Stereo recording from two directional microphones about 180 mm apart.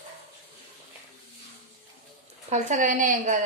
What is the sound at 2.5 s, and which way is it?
Speech, 40° right (ahead or behind).